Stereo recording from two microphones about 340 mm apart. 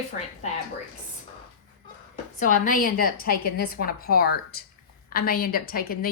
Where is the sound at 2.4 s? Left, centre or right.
Left.